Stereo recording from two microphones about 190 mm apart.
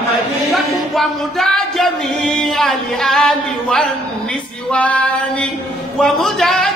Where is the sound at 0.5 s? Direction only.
Centre (ahead or behind).